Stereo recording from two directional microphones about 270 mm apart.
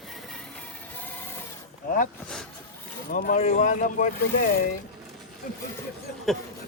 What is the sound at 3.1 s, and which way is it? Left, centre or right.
Speech, left.